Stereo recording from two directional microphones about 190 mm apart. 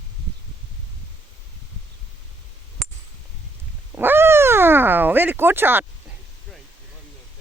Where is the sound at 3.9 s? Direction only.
10° right (ahead or behind).